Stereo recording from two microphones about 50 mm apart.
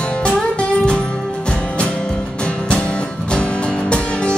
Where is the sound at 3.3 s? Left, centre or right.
Centre.